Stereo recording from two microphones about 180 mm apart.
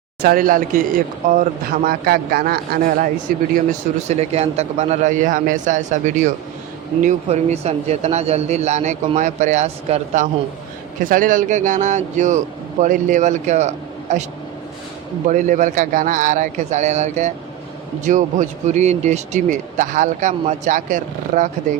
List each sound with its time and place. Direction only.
0.2 s speech: 55° right (ahead or behind)
4.1 s speech: 35° right (ahead or behind)
11.0 s speech: 50° right (ahead or behind)
15.3 s speech: 45° right (ahead or behind)